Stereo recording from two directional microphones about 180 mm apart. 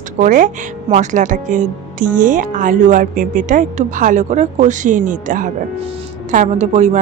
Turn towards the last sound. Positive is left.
turn(degrees=-40)  # may be behind; listen again after turning